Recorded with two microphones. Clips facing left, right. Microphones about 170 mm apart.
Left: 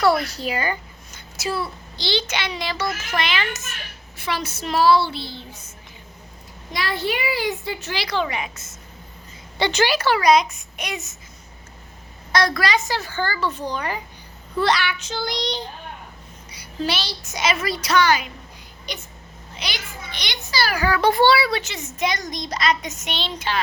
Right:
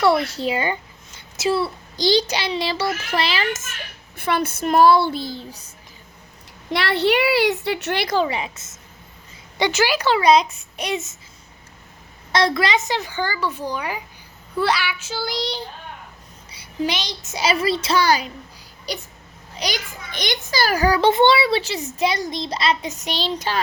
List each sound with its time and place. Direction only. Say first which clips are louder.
0.0 s a child's voice: right 1 dB; 25° right (ahead or behind)
2.0 s a child's voice: right 6 dB; 40° right (ahead or behind)
3.5 s speech: right 4 dB; 50° right (ahead or behind)
6.7 s a woman's voice: right 6 dB; 65° right (ahead or behind); by 8.2 s 50° right (ahead or behind)
8.2 s a woman's voice: right 3 dB; 30° right (ahead or behind)
9.6 s a woman's voice: right 1 dB; 10° right (ahead or behind); by 11.0 s 30° right (ahead or behind)
12.3 s a woman's voice: right 2 dB; 25° right (ahead or behind); by 15.6 s 5° right (ahead or behind)
16.7 s a woman's voice: right 1 dB; 15° right (ahead or behind)
17.3 s a child's voice: right 3 dB; 30° right (ahead or behind)
21.0 s a child's voice: even; 20° right (ahead or behind); by 23.6 s 40° right (ahead or behind)